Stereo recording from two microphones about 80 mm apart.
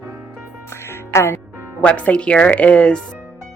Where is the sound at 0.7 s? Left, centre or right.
Left.